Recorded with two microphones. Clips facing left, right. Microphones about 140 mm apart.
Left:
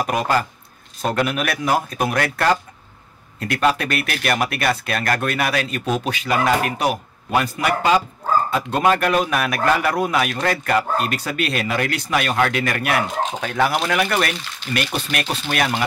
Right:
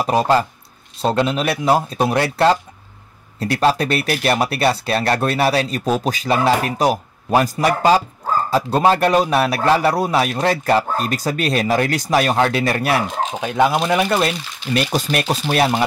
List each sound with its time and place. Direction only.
0.0 s speech: 30° right (ahead or behind)
13.4 s speech: 15° right (ahead or behind)